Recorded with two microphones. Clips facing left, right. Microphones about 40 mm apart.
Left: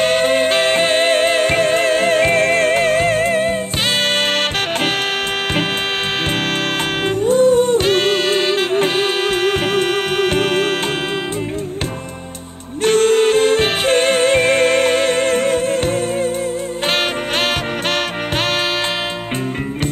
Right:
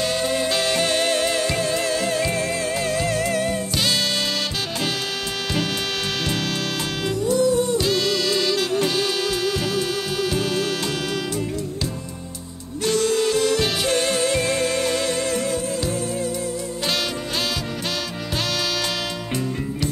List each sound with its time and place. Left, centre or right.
0.0 s music: left
7.1 s music: left
12.8 s music: left